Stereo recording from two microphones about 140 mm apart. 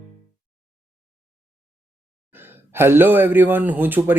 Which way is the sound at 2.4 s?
15° right (ahead or behind).